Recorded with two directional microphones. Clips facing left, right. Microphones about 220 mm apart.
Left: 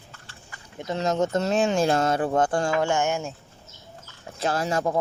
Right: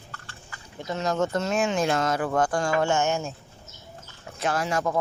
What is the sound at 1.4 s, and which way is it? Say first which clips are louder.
Speech: left 3 dB; 35° left (ahead or behind).